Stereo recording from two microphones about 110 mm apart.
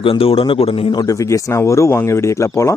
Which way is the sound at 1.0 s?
30° left (ahead or behind).